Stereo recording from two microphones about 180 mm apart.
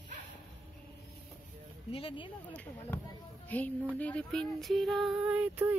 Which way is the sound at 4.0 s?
5° left (ahead or behind).